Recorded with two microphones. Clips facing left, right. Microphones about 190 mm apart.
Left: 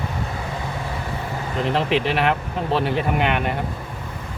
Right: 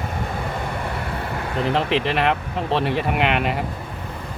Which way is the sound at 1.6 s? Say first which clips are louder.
Even; centre (ahead or behind).